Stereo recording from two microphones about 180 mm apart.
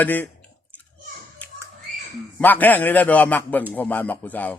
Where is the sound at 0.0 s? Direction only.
10° left (ahead or behind).